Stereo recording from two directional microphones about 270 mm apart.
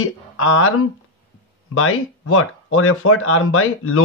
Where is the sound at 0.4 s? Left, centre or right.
Left.